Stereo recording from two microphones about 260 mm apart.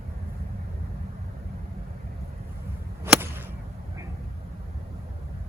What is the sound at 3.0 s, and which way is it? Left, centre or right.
Whip, centre.